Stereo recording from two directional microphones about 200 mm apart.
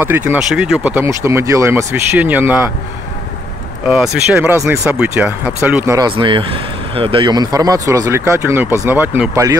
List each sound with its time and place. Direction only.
0.0 s speech: 10° right (ahead or behind)
3.8 s speech: 5° right (ahead or behind)
6.1 s speech: 25° right (ahead or behind)